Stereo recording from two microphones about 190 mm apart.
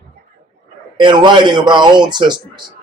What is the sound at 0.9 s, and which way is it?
Speech, 25° right (ahead or behind).